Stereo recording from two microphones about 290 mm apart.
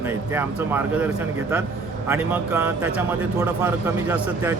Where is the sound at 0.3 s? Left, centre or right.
Centre.